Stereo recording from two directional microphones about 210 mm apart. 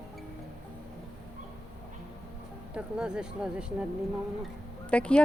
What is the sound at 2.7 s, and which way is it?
Speech, 5° right (ahead or behind).